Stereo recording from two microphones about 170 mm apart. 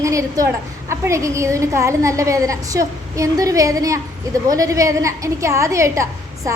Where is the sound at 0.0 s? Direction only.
20° right (ahead or behind).